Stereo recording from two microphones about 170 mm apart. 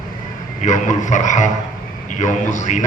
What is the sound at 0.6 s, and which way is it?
A man's voice, 45° left (ahead or behind).